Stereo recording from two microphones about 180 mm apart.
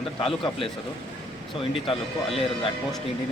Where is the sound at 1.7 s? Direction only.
30° left (ahead or behind).